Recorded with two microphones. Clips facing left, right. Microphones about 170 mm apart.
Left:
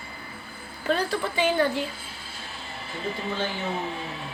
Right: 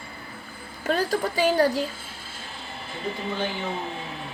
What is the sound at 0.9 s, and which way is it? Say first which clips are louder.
A woman's voice: right 1 dB; 45° right (ahead or behind).